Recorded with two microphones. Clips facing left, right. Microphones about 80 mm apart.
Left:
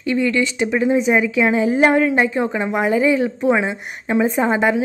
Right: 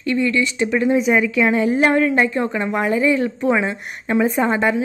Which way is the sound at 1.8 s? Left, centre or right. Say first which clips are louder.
Left 2 dB; left.